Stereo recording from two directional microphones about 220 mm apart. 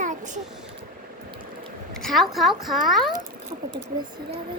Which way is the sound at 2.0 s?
Centre (ahead or behind).